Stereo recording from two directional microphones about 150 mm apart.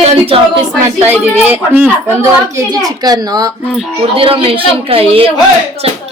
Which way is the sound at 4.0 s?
35° right (ahead or behind).